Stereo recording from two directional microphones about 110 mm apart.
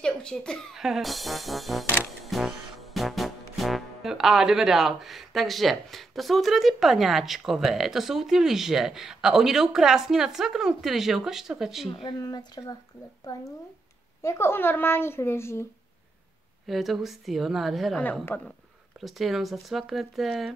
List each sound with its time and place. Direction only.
0.0 s speech: 10° left (ahead or behind)
0.7 s music: 5° right (ahead or behind)
11.9 s speech: 50° left (ahead or behind)
12.2 s speech: 35° left (ahead or behind)
14.2 s speech: 25° left (ahead or behind)
16.6 s music: centre (ahead or behind)
18.3 s speech: 20° left (ahead or behind)
18.9 s music: centre (ahead or behind)